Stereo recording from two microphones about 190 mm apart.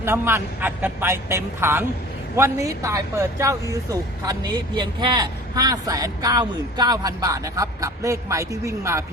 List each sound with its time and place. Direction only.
0.0 s speech: 10° right (ahead or behind)